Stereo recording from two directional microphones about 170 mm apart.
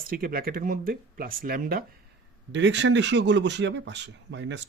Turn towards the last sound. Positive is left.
turn(degrees=-90)